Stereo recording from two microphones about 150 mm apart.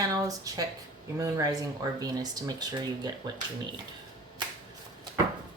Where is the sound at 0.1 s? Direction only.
25° right (ahead or behind).